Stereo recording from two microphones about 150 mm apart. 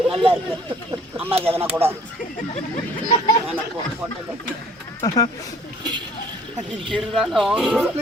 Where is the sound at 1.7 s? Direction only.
15° right (ahead or behind).